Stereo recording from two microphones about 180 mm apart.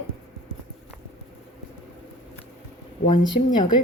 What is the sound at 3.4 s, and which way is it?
Speech, 40° left (ahead or behind).